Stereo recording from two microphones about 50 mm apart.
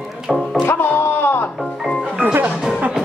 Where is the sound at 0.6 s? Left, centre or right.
Left.